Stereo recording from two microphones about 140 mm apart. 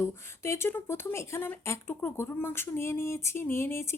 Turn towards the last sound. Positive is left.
turn(degrees=20)  # may be behind; listen again after turning